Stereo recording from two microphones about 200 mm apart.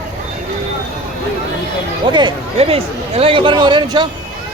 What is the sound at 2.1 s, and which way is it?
Speech, 25° right (ahead or behind).